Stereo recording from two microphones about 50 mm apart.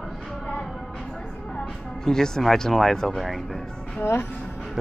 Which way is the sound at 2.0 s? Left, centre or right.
Centre.